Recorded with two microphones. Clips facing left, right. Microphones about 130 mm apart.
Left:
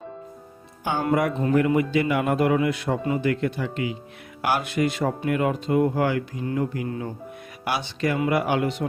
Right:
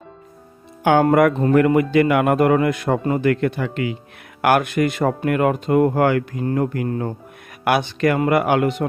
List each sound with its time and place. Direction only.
0.9 s speech: 65° right (ahead or behind)